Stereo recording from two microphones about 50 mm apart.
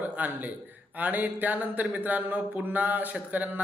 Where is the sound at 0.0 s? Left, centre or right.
Right.